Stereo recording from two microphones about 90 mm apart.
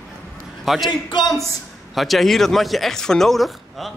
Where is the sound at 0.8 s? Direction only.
60° left (ahead or behind).